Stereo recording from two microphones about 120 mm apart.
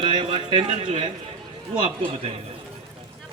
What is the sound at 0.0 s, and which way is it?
A man's voice, 50° right (ahead or behind).